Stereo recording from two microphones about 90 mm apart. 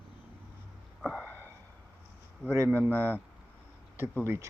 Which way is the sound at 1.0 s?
10° right (ahead or behind).